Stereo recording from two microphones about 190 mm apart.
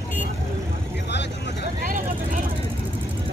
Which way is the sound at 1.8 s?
45° right (ahead or behind).